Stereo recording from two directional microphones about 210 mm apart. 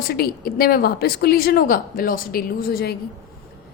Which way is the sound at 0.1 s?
45° left (ahead or behind).